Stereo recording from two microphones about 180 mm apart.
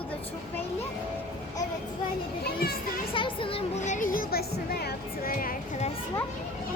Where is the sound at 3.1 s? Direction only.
30° left (ahead or behind); by 5.9 s 45° left (ahead or behind).